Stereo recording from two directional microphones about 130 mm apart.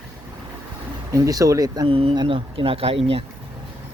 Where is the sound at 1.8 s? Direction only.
45° right (ahead or behind).